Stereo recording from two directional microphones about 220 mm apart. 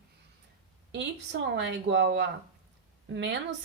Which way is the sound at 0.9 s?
50° right (ahead or behind).